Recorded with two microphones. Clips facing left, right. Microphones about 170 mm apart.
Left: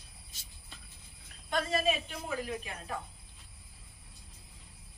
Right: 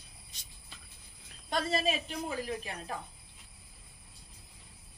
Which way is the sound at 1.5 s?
35° right (ahead or behind).